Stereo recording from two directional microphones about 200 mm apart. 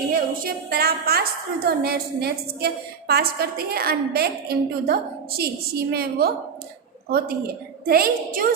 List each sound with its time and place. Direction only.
0.1 s a woman's voice: 50° right (ahead or behind)